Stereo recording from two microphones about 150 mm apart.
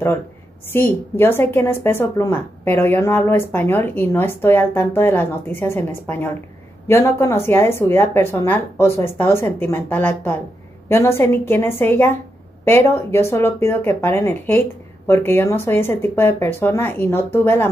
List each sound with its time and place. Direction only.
0.7 s a woman's voice: 15° left (ahead or behind)